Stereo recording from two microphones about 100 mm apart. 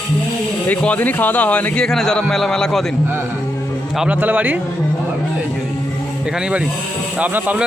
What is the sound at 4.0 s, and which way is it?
Speech, 15° right (ahead or behind).